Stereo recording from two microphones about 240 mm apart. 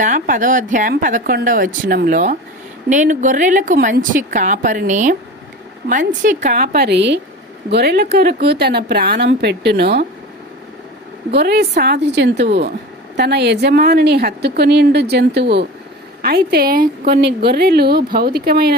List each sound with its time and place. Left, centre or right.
0.0 s a woman's voice: right
11.3 s a woman's voice: right